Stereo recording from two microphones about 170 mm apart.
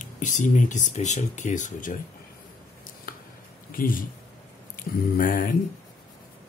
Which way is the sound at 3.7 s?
55° left (ahead or behind).